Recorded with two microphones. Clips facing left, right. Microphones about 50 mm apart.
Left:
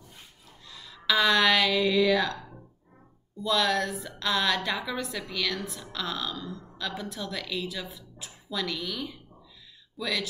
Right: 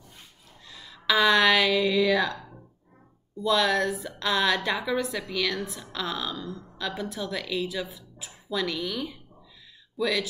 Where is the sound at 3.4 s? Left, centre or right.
Centre.